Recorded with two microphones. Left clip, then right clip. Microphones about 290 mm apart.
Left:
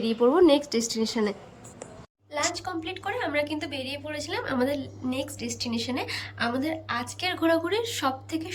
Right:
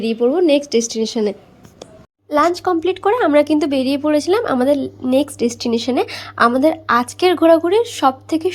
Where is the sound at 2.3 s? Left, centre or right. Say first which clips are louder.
Right 14 dB; centre.